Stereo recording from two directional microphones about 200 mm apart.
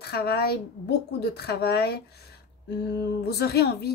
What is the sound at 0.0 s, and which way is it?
A woman's voice, 55° left (ahead or behind).